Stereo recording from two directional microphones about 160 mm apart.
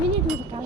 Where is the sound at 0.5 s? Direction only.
35° right (ahead or behind).